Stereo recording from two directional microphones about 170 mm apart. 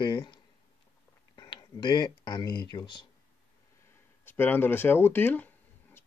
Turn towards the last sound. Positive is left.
turn(degrees=10)  # may be behind; listen again after turning